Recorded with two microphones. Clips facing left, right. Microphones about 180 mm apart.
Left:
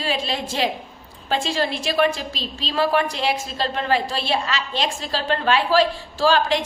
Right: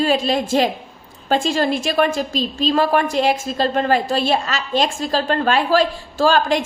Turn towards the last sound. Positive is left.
turn(degrees=-45)  # may be behind; listen again after turning